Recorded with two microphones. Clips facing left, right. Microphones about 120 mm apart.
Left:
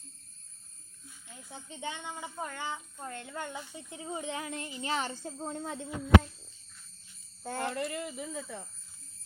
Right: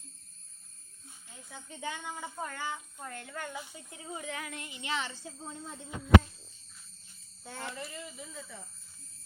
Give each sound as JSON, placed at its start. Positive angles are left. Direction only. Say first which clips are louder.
{"t": 1.5, "sound": "speech", "louder": "even", "side_deg": 25}
{"t": 7.4, "sound": "speech", "louder": "left 8 dB", "side_deg": 45}
{"t": 7.7, "sound": "speech", "louder": "left 7 dB", "side_deg": 65}